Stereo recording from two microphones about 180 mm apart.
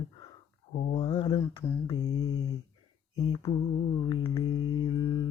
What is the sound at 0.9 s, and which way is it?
Mantra, 30° left (ahead or behind).